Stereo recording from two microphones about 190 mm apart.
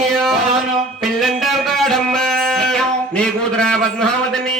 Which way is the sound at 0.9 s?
Centre (ahead or behind).